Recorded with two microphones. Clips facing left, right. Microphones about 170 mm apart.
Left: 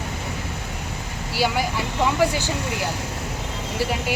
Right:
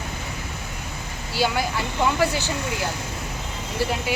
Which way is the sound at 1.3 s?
10° left (ahead or behind).